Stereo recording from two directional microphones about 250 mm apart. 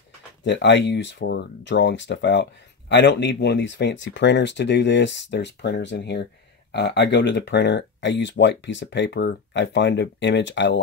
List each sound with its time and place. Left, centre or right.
0.4 s speech: left